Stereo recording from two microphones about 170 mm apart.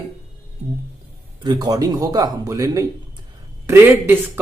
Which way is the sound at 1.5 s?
25° right (ahead or behind).